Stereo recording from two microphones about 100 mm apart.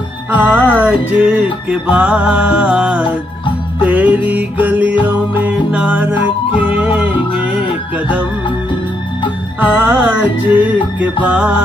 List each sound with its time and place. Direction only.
0.3 s music: 15° right (ahead or behind)
9.6 s music: 20° right (ahead or behind)